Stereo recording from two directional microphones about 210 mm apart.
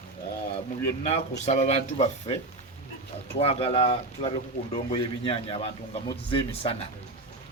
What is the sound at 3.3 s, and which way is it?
Speech, 30° left (ahead or behind).